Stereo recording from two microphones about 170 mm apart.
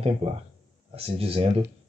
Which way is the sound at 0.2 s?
35° right (ahead or behind).